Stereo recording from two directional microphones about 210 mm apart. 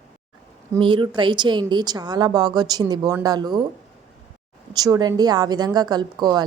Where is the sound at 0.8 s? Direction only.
25° right (ahead or behind).